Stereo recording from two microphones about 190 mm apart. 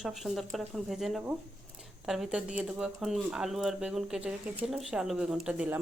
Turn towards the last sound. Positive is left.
turn(degrees=-10)  # may be behind; listen again after turning